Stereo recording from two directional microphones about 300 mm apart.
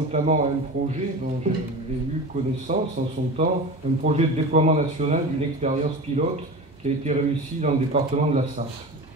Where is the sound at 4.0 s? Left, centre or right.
Right.